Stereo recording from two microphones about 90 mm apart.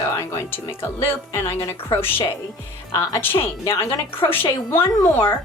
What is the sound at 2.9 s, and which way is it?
Speech, 40° left (ahead or behind).